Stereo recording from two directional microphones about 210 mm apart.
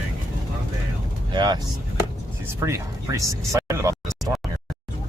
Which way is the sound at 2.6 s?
15° right (ahead or behind).